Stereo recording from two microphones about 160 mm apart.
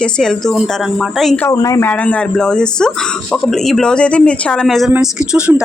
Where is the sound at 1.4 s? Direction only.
20° left (ahead or behind).